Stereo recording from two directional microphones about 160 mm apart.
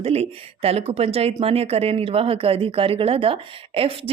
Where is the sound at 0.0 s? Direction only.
40° right (ahead or behind).